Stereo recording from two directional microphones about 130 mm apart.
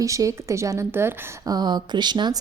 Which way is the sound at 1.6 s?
30° right (ahead or behind).